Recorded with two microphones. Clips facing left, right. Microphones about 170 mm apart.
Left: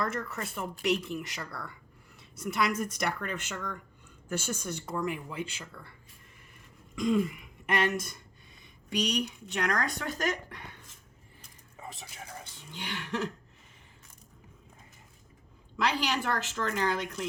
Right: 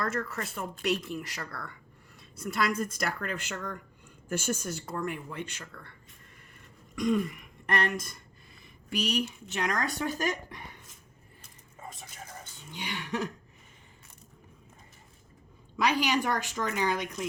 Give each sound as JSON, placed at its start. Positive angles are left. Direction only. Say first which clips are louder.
{"t": 0.0, "sound": "speech", "louder": "right 1 dB", "side_deg": 0}
{"t": 7.8, "sound": "a woman's voice", "louder": "left 3 dB", "side_deg": 0}
{"t": 12.0, "sound": "a sound", "louder": "left 1 dB", "side_deg": 10}
{"t": 12.7, "sound": "a woman's voice", "louder": "right 1 dB", "side_deg": -10}
{"t": 15.8, "sound": "a woman's voice", "louder": "right 3 dB", "side_deg": -10}